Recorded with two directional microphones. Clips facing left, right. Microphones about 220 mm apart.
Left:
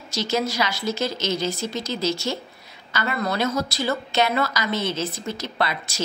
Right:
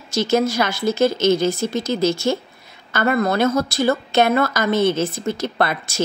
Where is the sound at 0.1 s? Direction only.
50° right (ahead or behind).